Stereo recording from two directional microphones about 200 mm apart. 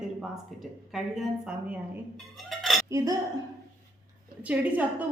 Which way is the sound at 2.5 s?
Centre (ahead or behind).